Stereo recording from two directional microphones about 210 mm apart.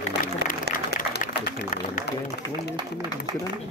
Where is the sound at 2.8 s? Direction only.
20° right (ahead or behind).